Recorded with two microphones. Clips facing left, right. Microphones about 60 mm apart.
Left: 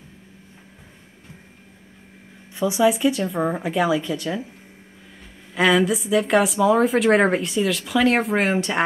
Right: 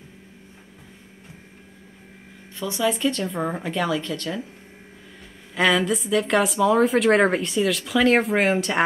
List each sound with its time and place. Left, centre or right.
2.5 s speech: centre
5.5 s a woman's voice: centre